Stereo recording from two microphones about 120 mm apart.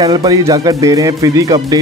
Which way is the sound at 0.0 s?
30° right (ahead or behind).